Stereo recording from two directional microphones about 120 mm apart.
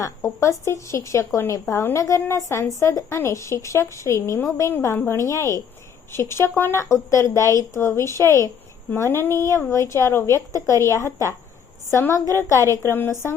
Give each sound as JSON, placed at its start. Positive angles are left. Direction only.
{"t": 0.0, "sound": "a woman's voice", "side_deg": 25}